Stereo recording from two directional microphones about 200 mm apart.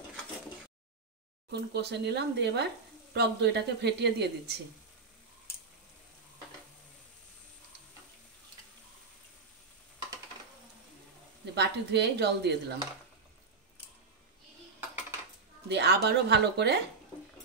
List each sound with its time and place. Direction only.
1.5 s speech: 55° right (ahead or behind)
11.5 s speech: 55° right (ahead or behind)
15.7 s speech: 55° right (ahead or behind)